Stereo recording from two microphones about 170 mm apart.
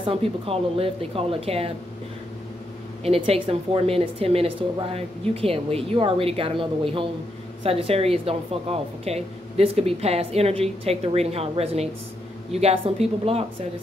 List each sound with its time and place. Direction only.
0.0 s a woman's voice: 35° right (ahead or behind)
3.0 s a woman's voice: 35° right (ahead or behind)